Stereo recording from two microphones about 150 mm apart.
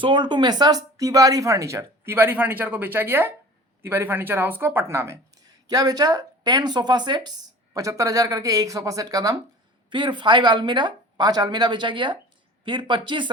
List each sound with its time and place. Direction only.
0.0 s speech: 30° right (ahead or behind)